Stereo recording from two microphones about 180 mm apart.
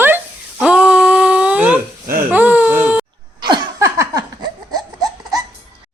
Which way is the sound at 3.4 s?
20° right (ahead or behind).